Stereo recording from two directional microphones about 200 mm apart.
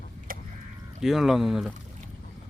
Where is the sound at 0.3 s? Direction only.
45° right (ahead or behind).